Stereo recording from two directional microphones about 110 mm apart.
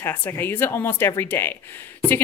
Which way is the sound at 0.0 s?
20° left (ahead or behind).